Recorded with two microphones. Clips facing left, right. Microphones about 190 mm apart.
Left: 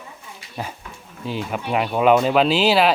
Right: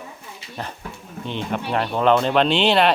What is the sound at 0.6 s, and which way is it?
Speech, 10° left (ahead or behind).